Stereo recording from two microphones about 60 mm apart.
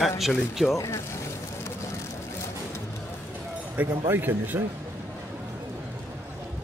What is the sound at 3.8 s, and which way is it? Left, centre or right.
Speech, right.